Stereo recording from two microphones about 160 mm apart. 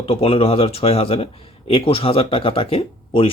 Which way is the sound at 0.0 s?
35° left (ahead or behind).